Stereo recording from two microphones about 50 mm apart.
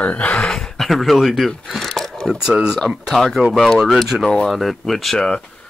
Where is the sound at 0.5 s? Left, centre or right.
Centre.